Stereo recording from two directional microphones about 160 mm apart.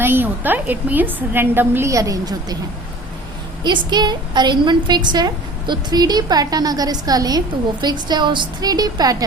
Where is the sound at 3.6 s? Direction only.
25° right (ahead or behind).